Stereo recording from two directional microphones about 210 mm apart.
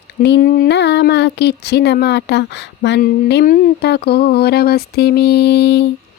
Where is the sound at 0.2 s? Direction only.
50° left (ahead or behind).